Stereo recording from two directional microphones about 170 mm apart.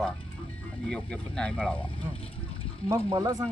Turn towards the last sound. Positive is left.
turn(degrees=-20)  # may be behind; listen again after turning